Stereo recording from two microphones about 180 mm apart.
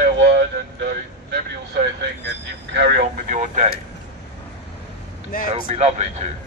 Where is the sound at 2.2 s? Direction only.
70° right (ahead or behind).